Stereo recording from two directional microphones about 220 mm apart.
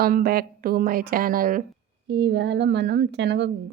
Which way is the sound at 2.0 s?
55° right (ahead or behind).